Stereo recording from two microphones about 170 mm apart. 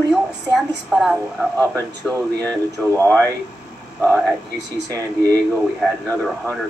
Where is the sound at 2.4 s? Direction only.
15° right (ahead or behind).